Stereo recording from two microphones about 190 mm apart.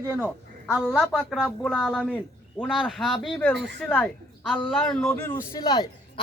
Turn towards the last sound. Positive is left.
turn(degrees=20)  # may be behind; listen again after turning